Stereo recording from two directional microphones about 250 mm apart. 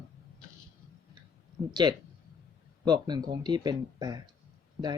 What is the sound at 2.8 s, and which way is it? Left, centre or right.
Speech, centre.